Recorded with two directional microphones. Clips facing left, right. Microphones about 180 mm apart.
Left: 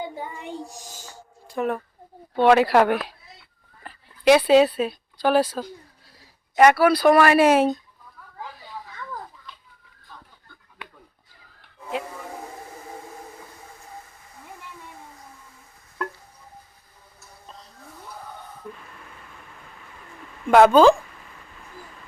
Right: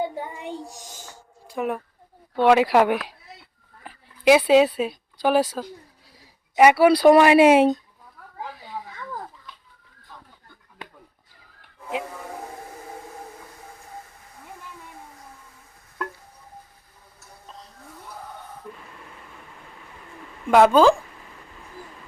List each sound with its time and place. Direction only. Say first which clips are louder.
1.5 s speech: left 1 dB; 10° right (ahead or behind)
5.2 s speech: even; 15° right (ahead or behind)
6.1 s a sound: even; 10° right (ahead or behind)
6.7 s speech: right 3 dB; 30° right (ahead or behind)
20.5 s speech: left 1 dB; centre (ahead or behind)